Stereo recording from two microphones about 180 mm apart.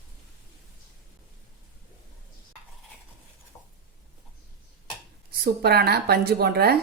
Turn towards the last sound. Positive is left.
turn(degrees=-60)  # may be behind; listen again after turning